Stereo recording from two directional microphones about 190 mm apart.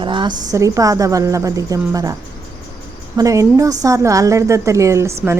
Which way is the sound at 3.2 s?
15° right (ahead or behind).